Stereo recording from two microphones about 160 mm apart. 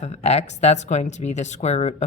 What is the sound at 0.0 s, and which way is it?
Speech, 45° left (ahead or behind).